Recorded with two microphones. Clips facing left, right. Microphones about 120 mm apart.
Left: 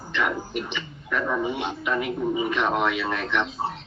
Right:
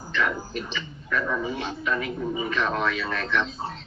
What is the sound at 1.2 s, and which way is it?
A man's voice, 20° left (ahead or behind).